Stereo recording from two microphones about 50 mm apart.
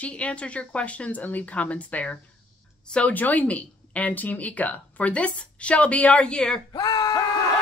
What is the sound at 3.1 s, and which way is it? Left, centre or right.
Speech, left.